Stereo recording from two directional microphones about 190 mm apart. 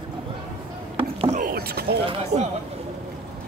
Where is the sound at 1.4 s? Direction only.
50° right (ahead or behind).